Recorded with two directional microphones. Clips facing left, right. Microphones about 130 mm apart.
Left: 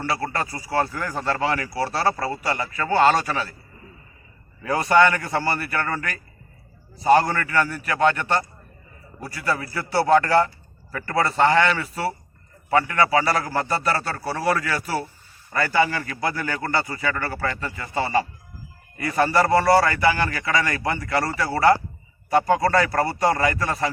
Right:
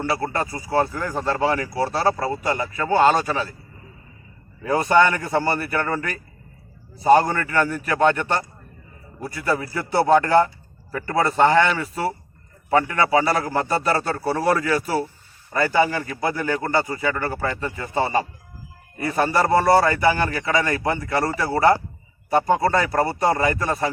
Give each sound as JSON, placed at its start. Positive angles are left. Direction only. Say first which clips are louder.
{"t": 0.0, "sound": "a man's voice", "louder": "right 2 dB", "side_deg": -20}
{"t": 4.6, "sound": "a man's voice", "louder": "right 1 dB", "side_deg": -20}
{"t": 9.4, "sound": "a man's voice", "louder": "right 2 dB", "side_deg": -15}
{"t": 11.4, "sound": "a man's voice", "louder": "right 1 dB", "side_deg": -10}